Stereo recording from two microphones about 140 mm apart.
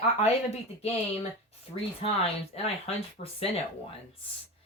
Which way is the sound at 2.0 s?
45° left (ahead or behind).